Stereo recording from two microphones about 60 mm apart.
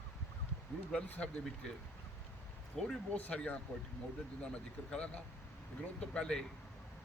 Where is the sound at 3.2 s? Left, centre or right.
Left.